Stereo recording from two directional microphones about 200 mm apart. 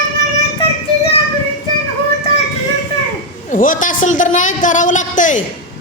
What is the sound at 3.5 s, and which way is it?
Speech, 40° left (ahead or behind).